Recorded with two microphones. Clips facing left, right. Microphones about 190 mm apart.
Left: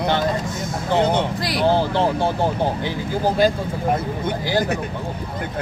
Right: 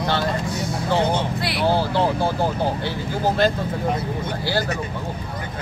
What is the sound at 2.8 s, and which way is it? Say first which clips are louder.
Speech: left 2 dB; 15° left (ahead or behind).